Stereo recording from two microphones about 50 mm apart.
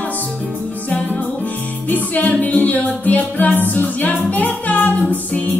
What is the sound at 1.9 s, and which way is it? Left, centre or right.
Music, left.